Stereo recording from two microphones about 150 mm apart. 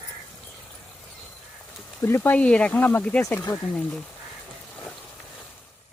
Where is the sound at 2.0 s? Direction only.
15° left (ahead or behind).